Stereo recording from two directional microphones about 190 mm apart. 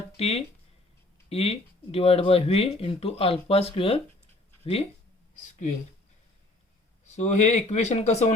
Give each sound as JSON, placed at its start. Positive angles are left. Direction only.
{"t": 0.2, "sound": "speech", "side_deg": 35}
{"t": 7.1, "sound": "speech", "side_deg": 40}